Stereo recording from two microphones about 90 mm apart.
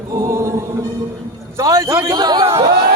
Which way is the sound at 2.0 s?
50° right (ahead or behind).